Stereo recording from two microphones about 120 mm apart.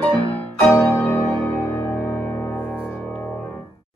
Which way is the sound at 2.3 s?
20° left (ahead or behind).